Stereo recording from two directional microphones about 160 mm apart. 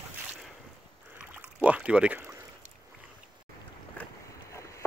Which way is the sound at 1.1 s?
10° right (ahead or behind).